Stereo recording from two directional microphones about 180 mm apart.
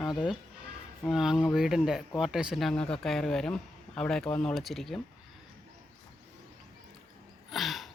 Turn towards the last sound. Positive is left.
turn(degrees=0)  # may be behind; listen again after turning